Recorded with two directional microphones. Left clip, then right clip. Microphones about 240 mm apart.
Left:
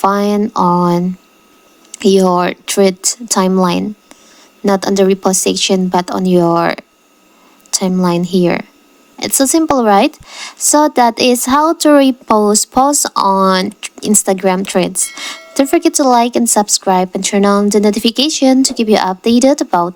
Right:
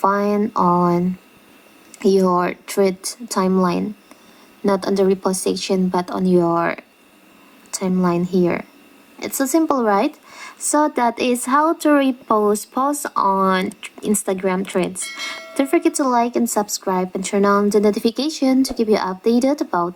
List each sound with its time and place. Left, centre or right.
0.0 s a woman's voice: left
11.8 s a woman's voice: left
13.0 s a woman's voice: left
13.4 s a woman's voice: left